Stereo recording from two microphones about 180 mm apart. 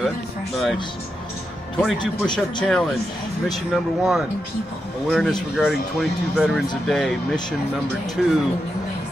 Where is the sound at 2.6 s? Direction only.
Centre (ahead or behind).